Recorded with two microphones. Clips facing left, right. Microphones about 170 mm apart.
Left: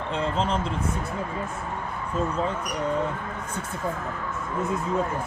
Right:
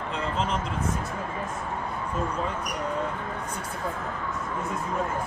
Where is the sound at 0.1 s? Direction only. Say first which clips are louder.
Left 3 dB; 30° left (ahead or behind).